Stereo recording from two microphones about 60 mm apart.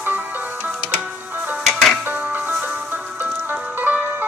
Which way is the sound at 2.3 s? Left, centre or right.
Right.